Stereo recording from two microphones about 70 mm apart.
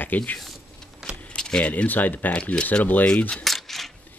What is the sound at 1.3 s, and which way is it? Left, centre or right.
Speech, centre.